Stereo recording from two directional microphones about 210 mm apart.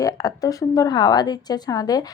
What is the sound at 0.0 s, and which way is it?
Speech, 15° left (ahead or behind).